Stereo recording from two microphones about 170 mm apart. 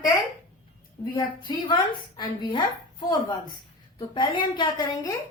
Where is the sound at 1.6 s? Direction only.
30° left (ahead or behind).